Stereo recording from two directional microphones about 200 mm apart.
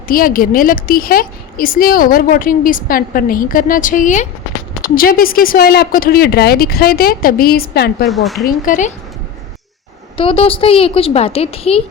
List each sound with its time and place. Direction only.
0.1 s a woman's voice: 45° left (ahead or behind)
8.0 s a woman's voice: centre (ahead or behind)
8.6 s speech: 40° left (ahead or behind)
10.2 s a woman's voice: 25° left (ahead or behind)